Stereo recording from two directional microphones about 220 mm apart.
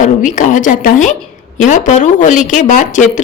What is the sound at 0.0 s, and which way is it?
Speech, 35° left (ahead or behind).